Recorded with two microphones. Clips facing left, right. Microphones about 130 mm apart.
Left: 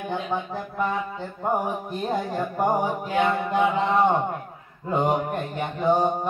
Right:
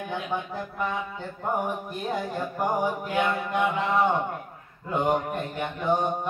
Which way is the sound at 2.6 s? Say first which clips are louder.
Left 3 dB; 25° left (ahead or behind).